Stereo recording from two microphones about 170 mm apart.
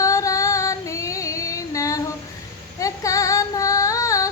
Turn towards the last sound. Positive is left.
turn(degrees=20)  # may be behind; listen again after turning